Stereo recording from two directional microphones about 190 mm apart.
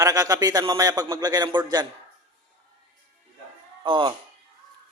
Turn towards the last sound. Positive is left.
turn(degrees=-25)  # may be behind; listen again after turning